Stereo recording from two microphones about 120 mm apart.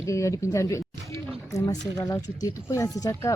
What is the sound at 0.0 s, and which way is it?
Speech, 25° left (ahead or behind).